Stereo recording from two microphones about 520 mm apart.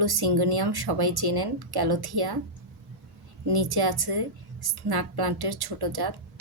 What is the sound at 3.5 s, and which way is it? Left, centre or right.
A woman's voice, right.